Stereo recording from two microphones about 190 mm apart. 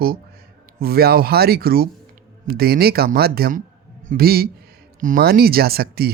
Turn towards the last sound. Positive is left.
turn(degrees=-55)  # may be behind; listen again after turning